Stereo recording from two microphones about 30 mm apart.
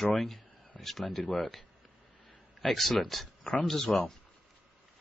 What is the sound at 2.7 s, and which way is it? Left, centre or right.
Speech, centre.